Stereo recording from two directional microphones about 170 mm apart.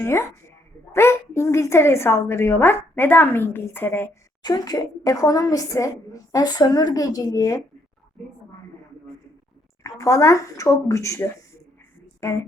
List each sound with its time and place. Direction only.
0.0 s a woman's voice: 15° left (ahead or behind)
4.4 s a woman's voice: 25° left (ahead or behind)
9.8 s a woman's voice: 20° left (ahead or behind)